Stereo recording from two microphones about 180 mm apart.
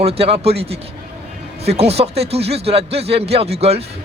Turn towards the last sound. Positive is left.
turn(degrees=-35)  # may be behind; listen again after turning